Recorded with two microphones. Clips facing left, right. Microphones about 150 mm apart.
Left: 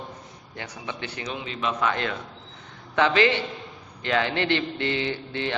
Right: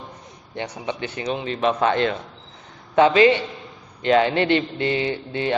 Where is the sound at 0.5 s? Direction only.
20° right (ahead or behind).